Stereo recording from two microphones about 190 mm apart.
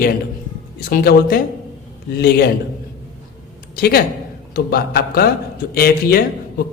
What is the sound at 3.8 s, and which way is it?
A man's voice, 55° left (ahead or behind).